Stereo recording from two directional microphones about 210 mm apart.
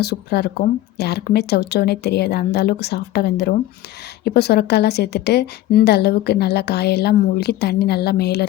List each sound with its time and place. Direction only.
0.0 s a woman's voice: 50° left (ahead or behind)